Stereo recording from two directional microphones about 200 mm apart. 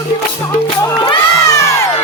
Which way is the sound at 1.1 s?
15° left (ahead or behind).